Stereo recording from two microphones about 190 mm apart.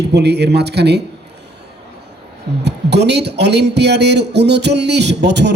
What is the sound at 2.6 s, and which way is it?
A man's voice, 60° right (ahead or behind).